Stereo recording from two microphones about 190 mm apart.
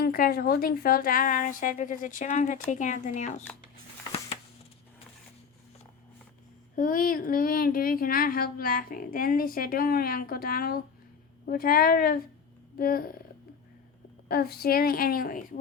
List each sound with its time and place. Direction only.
0.0 s speech: 50° left (ahead or behind)
6.7 s speech: 50° left (ahead or behind)
14.3 s speech: 50° left (ahead or behind)